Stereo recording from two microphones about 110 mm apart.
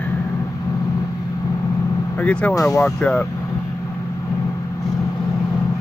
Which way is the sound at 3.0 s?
10° left (ahead or behind).